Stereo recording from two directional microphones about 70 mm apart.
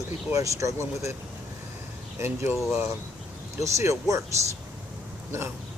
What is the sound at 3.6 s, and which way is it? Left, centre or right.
Speech, right.